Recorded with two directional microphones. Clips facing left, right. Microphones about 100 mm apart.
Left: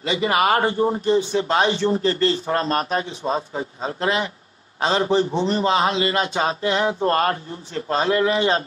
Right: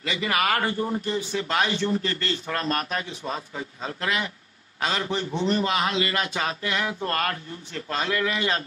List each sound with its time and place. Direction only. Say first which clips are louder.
0.0 s a man's voice: left 6 dB; 25° left (ahead or behind)